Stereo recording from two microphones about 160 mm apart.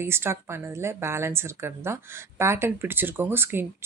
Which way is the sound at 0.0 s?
15° right (ahead or behind).